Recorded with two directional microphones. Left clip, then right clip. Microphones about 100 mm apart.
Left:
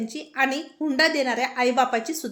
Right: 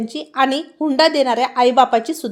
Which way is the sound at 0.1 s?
50° right (ahead or behind).